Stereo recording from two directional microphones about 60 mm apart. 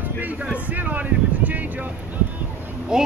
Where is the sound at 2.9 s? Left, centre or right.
Centre.